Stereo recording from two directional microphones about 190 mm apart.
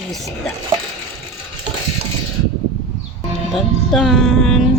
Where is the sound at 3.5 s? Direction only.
Centre (ahead or behind).